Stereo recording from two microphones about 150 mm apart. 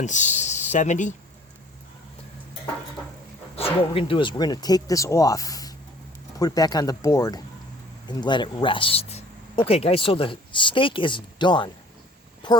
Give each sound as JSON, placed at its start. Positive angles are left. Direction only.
{"t": 0.0, "sound": "speech", "side_deg": 55}
{"t": 3.5, "sound": "speech", "side_deg": 40}